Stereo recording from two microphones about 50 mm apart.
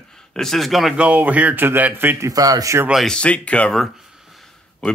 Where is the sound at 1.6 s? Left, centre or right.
Right.